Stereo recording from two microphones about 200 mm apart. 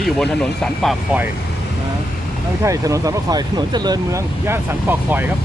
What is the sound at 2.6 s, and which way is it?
Speech, 15° right (ahead or behind).